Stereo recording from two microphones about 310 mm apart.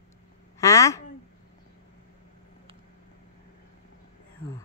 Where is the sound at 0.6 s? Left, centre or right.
Centre.